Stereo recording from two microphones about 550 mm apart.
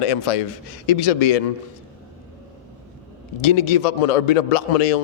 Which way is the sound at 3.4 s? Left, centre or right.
Left.